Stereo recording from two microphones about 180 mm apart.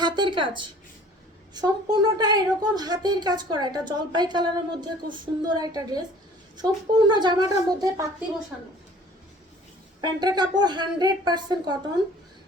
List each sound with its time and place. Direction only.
0.0 s a sound: 25° right (ahead or behind)
1.5 s a woman's voice: 20° right (ahead or behind)
10.0 s a woman's voice: 25° right (ahead or behind)